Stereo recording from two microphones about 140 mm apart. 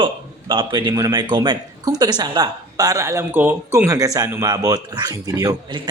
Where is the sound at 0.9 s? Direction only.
25° right (ahead or behind).